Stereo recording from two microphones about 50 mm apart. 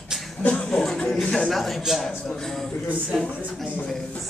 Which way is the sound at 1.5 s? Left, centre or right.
Centre.